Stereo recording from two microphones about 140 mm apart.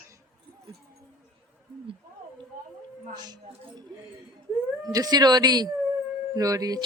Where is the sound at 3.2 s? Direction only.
30° right (ahead or behind).